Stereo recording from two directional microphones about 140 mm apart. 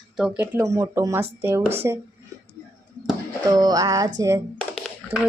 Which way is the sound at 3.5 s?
25° right (ahead or behind).